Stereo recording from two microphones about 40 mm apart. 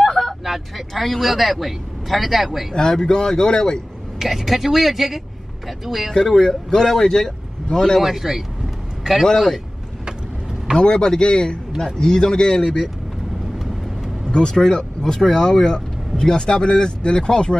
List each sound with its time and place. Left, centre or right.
0.0 s a sound: centre
0.5 s speech: centre
2.7 s speech: centre
4.2 s speech: centre
6.3 s speech: centre
8.0 s speech: centre
9.2 s speech: centre
10.8 s speech: left
11.8 s speech: centre
14.2 s vehicle: left
14.5 s speech: centre